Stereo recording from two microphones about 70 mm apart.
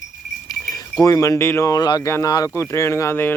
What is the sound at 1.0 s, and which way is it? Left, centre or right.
Speech, left.